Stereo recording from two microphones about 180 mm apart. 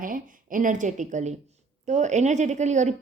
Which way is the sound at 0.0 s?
50° right (ahead or behind).